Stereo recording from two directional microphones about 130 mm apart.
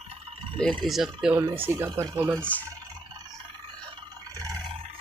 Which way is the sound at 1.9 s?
30° right (ahead or behind).